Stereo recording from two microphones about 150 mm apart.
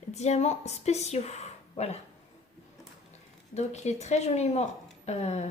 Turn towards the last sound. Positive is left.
turn(degrees=50)  # may be behind; listen again after turning